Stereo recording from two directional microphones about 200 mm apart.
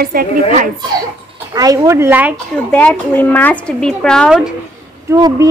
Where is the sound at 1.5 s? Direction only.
20° right (ahead or behind).